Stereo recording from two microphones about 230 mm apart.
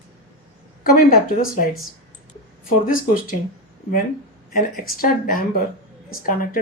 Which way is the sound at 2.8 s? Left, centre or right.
Left.